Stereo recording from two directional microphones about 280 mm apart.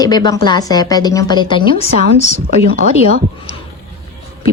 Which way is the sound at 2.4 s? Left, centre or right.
Right.